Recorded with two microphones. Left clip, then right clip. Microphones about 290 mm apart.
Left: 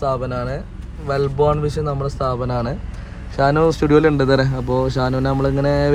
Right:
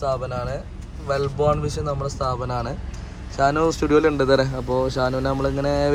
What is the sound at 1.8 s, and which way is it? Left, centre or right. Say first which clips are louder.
Speech: left 3 dB; left.